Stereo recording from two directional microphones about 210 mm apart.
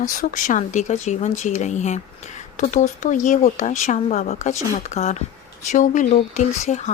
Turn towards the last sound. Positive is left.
turn(degrees=30)  # may be behind; listen again after turning